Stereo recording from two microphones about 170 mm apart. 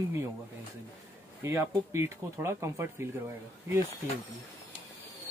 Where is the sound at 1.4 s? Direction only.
15° right (ahead or behind).